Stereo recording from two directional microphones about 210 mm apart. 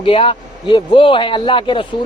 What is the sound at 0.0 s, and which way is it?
A man's voice, 25° left (ahead or behind).